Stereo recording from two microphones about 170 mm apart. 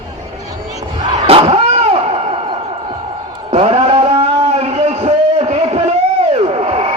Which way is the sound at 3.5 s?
35° right (ahead or behind).